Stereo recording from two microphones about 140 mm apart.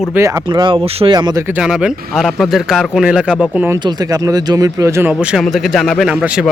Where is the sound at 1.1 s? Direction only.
30° right (ahead or behind).